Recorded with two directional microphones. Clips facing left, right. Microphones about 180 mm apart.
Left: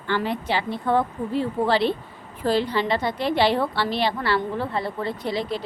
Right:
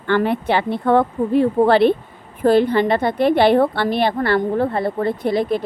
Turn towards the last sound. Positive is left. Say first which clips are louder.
# right 8 dB
turn(degrees=-55)  # may be behind; listen again after turning